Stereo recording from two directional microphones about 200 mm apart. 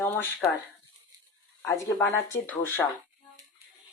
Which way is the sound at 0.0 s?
10° left (ahead or behind).